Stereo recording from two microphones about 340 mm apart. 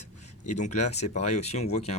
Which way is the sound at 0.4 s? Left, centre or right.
Left.